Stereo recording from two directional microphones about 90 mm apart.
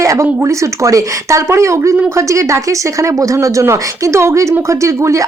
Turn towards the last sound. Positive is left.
turn(degrees=-35)  # may be behind; listen again after turning